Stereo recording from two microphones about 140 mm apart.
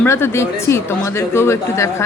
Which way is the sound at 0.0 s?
15° left (ahead or behind).